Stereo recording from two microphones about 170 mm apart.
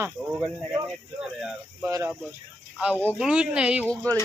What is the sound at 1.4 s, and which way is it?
Speech, 5° right (ahead or behind).